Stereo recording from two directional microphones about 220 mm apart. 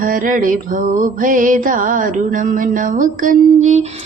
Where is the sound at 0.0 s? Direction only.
40° right (ahead or behind).